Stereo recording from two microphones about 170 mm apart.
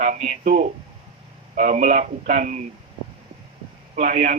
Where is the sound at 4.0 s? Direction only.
50° right (ahead or behind).